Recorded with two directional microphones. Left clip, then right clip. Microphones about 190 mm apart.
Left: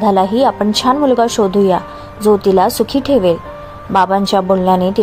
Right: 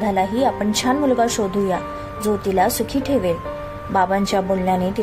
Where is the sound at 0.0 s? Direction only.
20° left (ahead or behind).